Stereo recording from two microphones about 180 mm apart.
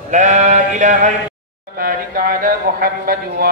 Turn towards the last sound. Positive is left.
turn(degrees=-50)  # may be behind; listen again after turning